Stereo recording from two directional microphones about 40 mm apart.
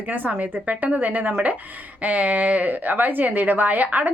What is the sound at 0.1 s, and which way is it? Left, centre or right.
Speech, right.